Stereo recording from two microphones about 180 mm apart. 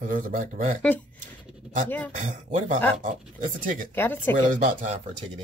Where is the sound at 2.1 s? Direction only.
45° right (ahead or behind).